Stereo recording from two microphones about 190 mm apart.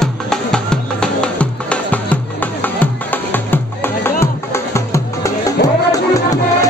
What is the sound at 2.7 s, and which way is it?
Music, 10° left (ahead or behind).